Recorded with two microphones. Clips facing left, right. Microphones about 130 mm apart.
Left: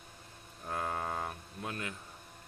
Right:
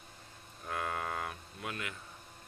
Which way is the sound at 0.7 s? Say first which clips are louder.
Left 1 dB; 25° left (ahead or behind).